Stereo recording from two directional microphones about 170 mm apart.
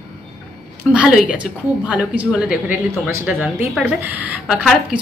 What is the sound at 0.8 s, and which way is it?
A woman's voice, centre (ahead or behind).